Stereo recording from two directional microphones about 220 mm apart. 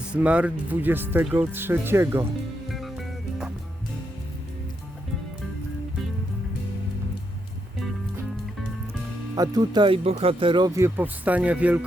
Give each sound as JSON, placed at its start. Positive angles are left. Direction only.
{"t": 0.1, "sound": "speech", "side_deg": -5}
{"t": 2.7, "sound": "music", "side_deg": 0}
{"t": 9.3, "sound": "speech", "side_deg": -20}